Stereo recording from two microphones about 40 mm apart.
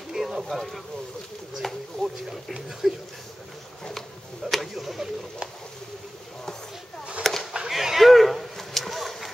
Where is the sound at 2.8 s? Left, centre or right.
Centre.